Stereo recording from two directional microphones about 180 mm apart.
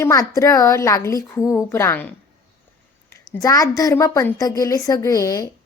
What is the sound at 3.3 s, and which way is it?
A woman's voice, 20° left (ahead or behind).